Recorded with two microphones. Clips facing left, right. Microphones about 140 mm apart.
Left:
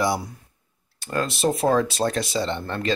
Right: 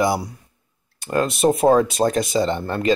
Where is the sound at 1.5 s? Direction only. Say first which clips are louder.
Right 5 dB; 25° right (ahead or behind).